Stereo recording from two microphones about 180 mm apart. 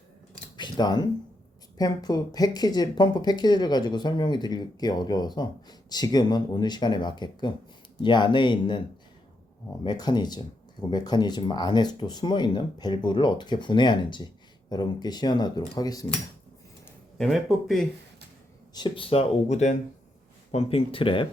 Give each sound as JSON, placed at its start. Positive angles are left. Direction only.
{"t": 0.5, "sound": "a sound", "side_deg": 25}
{"t": 1.8, "sound": "speech", "side_deg": 20}
{"t": 9.8, "sound": "speech", "side_deg": 25}
{"t": 17.2, "sound": "speech", "side_deg": 0}
{"t": 18.7, "sound": "speech", "side_deg": 25}